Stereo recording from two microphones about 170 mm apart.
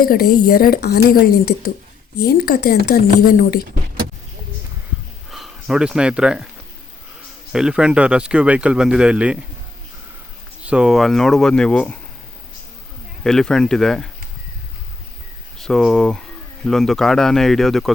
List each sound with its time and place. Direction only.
0.0 s a woman's voice: 65° left (ahead or behind)
5.3 s speech: 5° right (ahead or behind)
7.5 s speech: 5° right (ahead or behind)
10.6 s speech: 5° right (ahead or behind)
13.2 s speech: 5° left (ahead or behind)
15.5 s speech: centre (ahead or behind)